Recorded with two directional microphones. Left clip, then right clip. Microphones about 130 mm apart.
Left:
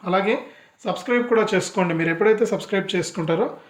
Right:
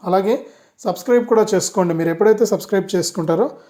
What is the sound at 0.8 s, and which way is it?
Speech, centre (ahead or behind).